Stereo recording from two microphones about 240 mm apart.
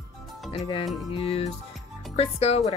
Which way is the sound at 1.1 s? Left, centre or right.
Left.